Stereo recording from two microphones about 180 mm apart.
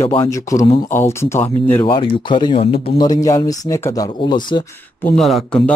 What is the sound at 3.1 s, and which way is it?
Speech, 20° left (ahead or behind).